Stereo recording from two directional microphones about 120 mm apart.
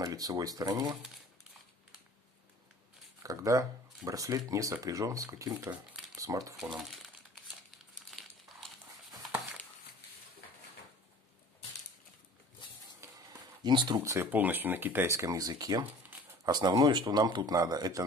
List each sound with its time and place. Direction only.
0.0 s speech: 30° right (ahead or behind)
3.2 s speech: 25° right (ahead or behind)
6.5 s speech: 5° right (ahead or behind)
8.1 s crumpling: centre (ahead or behind)
13.0 s a sound: 35° right (ahead or behind)
13.9 s speech: 20° right (ahead or behind)
15.8 s a sound: 15° right (ahead or behind)
16.4 s speech: 35° right (ahead or behind)